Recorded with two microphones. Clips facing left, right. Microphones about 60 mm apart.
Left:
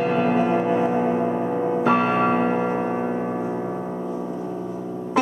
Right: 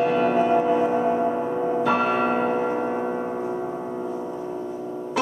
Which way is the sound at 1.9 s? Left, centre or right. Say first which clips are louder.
Left 4 dB; left.